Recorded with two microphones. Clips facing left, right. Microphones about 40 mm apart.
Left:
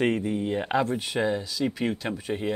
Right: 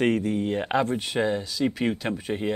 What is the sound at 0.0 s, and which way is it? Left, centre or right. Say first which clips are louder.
Speech: right 2 dB; centre.